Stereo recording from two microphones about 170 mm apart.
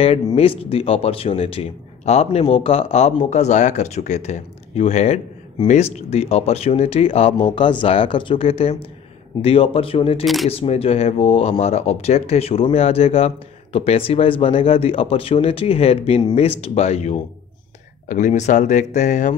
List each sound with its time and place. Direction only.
0.4 s speech: 35° left (ahead or behind)
10.2 s speech: centre (ahead or behind)
10.5 s speech: 35° left (ahead or behind)